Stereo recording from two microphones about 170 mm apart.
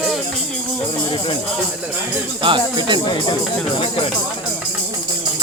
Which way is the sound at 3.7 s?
30° left (ahead or behind).